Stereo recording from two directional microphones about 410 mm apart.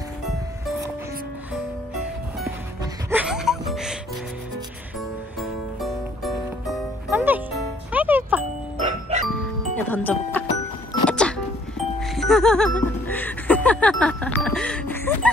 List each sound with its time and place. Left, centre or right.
3.1 s music: centre
5.4 s music: centre
8.7 s music: centre
9.3 s music: centre